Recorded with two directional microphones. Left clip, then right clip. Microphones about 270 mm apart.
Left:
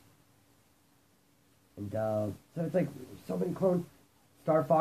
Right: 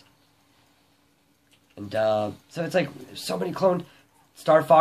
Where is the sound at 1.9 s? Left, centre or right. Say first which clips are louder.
Right 9 dB; centre.